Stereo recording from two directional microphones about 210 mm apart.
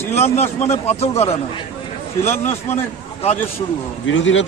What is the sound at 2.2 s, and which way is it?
Speech, 10° left (ahead or behind).